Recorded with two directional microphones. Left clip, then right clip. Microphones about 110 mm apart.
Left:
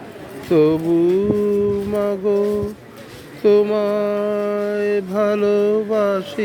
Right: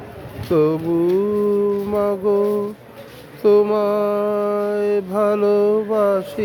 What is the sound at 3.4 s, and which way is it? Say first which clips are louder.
Mantra: even; 30° right (ahead or behind).